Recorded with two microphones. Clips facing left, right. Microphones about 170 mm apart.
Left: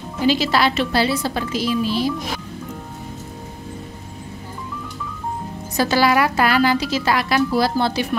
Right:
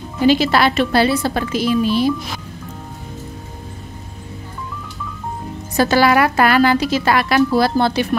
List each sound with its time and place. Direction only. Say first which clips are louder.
0.3 s a woman's voice: right 3 dB; 55° right (ahead or behind)
5.8 s a woman's voice: right 3 dB; 55° right (ahead or behind)